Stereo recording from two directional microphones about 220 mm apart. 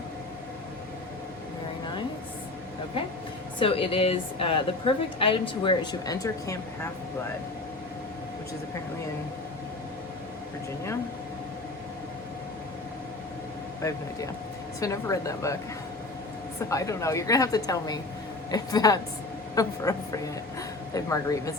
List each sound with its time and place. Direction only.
3.6 s a woman's voice: 25° left (ahead or behind)
14.8 s a woman's voice: 15° left (ahead or behind)
16.6 s a woman's voice: 15° left (ahead or behind)